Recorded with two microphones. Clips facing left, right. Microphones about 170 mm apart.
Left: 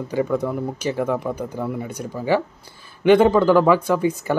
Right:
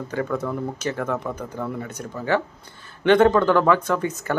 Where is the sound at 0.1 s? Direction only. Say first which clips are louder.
Left 4 dB; 15° left (ahead or behind).